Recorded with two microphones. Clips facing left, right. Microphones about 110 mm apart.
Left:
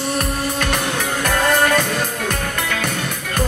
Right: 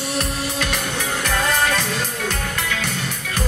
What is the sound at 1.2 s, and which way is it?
Music, 50° left (ahead or behind).